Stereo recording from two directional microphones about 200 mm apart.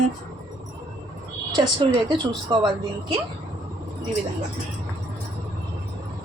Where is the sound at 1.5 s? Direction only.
20° right (ahead or behind).